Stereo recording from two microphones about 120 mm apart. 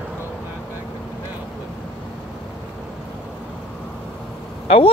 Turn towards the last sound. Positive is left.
turn(degrees=50)  # may be behind; listen again after turning